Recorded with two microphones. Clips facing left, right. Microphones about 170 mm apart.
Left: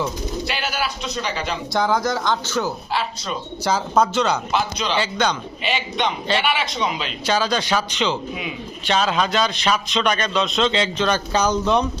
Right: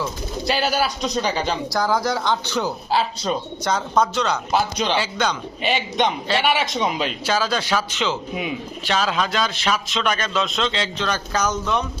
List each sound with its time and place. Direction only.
0.4 s a man's voice: 35° right (ahead or behind)
1.7 s speech: 5° right (ahead or behind)
2.9 s a man's voice: 35° right (ahead or behind)
3.6 s a man's voice: 5° left (ahead or behind)
4.5 s a man's voice: 50° right (ahead or behind)
4.9 s speech: 5° right (ahead or behind)
5.6 s a man's voice: 45° right (ahead or behind)
7.3 s a man's voice: 5° right (ahead or behind)
10.6 s speech: 20° left (ahead or behind)